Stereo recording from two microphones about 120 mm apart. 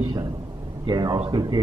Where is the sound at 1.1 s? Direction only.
50° right (ahead or behind).